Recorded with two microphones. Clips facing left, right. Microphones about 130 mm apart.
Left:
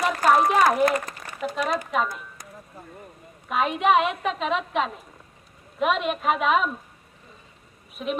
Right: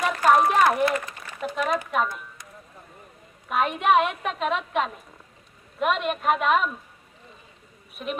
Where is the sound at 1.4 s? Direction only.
Centre (ahead or behind).